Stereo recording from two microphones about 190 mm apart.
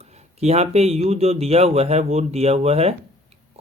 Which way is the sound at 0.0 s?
35° right (ahead or behind).